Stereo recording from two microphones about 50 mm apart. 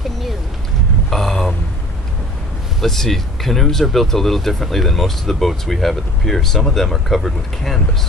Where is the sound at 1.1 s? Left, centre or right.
Centre.